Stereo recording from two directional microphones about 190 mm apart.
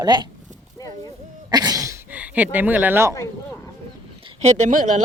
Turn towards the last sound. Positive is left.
turn(degrees=-40)  # may be behind; listen again after turning